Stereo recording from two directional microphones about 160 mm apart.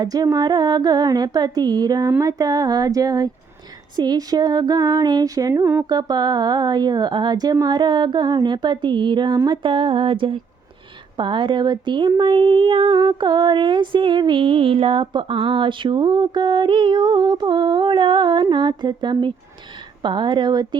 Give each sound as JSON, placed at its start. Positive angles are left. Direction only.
{"t": 0.0, "sound": "speech", "side_deg": -25}